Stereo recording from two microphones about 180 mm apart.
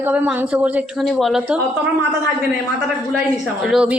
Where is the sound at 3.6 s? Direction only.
5° right (ahead or behind).